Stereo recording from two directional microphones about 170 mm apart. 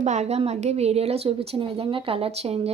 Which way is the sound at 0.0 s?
45° right (ahead or behind).